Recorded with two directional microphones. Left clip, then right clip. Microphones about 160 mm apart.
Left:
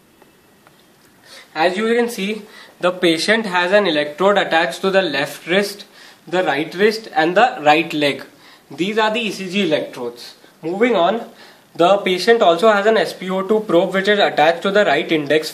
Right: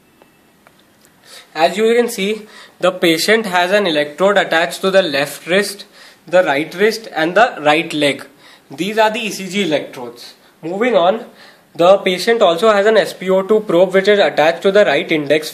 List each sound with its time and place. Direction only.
1.5 s speech: 60° right (ahead or behind); by 15.5 s 40° right (ahead or behind)